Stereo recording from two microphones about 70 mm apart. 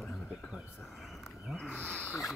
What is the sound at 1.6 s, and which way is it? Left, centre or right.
Wild animals, centre.